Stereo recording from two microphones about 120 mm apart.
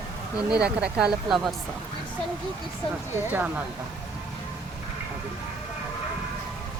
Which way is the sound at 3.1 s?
15° right (ahead or behind).